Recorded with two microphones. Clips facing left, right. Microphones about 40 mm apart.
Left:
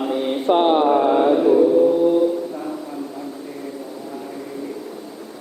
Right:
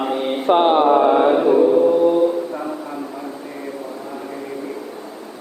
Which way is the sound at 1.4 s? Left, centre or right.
Right.